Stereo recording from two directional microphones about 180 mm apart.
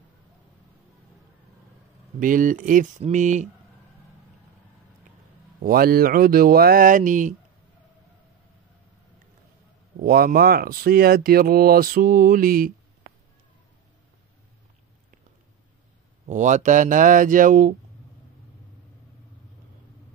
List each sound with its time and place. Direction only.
2.1 s speech: 50° right (ahead or behind)
5.6 s speech: 55° right (ahead or behind)
10.0 s speech: 55° right (ahead or behind)
16.3 s speech: 45° right (ahead or behind)